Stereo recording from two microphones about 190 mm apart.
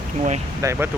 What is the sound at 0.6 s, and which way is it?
Speech, 15° right (ahead or behind).